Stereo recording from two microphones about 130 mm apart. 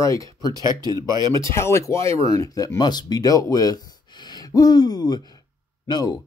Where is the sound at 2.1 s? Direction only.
50° right (ahead or behind).